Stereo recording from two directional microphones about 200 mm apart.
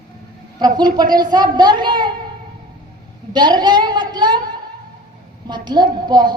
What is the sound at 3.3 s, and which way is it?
Speech, 20° right (ahead or behind).